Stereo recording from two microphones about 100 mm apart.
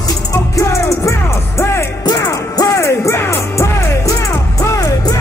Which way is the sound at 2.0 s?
40° left (ahead or behind).